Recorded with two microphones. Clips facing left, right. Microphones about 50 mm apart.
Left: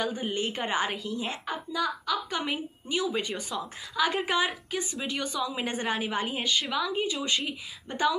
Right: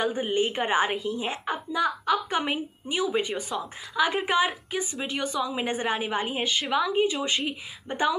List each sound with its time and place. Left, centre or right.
0.0 s a woman's voice: right
6.7 s a woman's voice: right